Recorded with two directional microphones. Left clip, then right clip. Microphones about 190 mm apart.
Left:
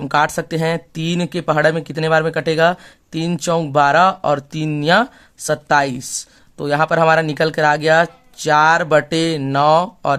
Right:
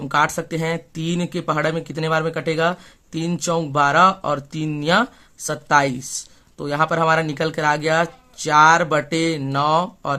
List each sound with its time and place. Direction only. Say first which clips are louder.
0.0 s speech: left 3 dB; 30° left (ahead or behind)